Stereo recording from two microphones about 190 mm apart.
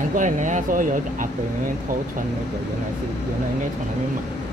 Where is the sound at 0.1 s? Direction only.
40° right (ahead or behind).